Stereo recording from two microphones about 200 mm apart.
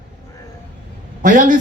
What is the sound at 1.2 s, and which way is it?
Speech, 40° right (ahead or behind).